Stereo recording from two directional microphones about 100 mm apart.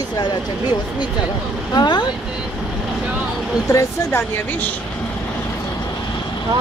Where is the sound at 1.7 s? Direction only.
45° left (ahead or behind).